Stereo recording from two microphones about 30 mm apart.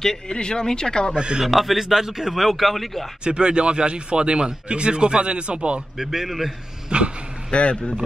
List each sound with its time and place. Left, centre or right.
0.3 s speech: left
1.1 s speech: right
1.4 s speech: centre
2.0 s speech: centre
2.3 s speech: centre
3.3 s speech: right
5.9 s speech: centre
6.2 s speech: centre
6.9 s speech: right
7.5 s speech: left